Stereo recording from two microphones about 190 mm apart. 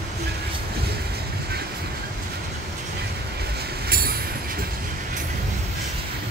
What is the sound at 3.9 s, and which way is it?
Train, 50° right (ahead or behind).